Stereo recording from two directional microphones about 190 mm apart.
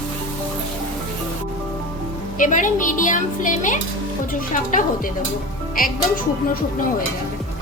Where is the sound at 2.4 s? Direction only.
45° left (ahead or behind).